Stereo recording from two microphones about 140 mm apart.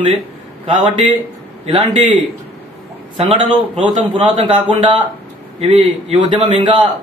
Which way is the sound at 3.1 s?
40° right (ahead or behind).